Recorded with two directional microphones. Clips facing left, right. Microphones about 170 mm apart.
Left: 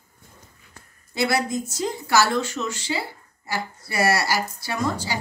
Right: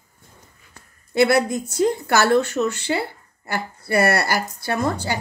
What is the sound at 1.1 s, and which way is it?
A woman's voice, 60° right (ahead or behind).